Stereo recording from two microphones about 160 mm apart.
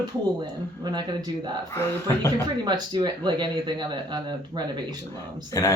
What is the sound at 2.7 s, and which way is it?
Speech, 30° right (ahead or behind).